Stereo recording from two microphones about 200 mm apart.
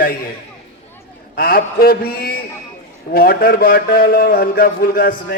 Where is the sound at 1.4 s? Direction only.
45° left (ahead or behind).